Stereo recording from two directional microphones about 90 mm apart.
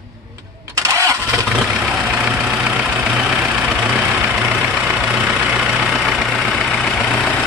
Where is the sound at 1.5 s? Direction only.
10° right (ahead or behind).